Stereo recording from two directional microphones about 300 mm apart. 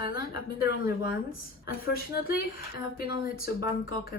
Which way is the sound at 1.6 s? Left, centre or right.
Left.